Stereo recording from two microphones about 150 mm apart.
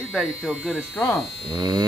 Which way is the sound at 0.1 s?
5° right (ahead or behind).